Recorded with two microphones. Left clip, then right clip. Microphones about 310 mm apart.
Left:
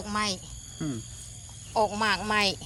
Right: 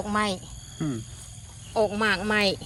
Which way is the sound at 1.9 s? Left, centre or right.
Centre.